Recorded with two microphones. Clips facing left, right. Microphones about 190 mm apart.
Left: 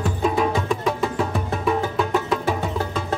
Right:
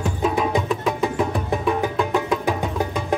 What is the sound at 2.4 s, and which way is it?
Music, 15° right (ahead or behind).